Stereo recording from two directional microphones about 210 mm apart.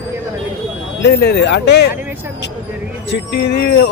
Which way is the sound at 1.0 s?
50° left (ahead or behind).